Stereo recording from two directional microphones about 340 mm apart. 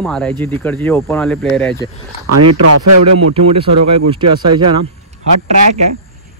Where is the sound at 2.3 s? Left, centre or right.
Right.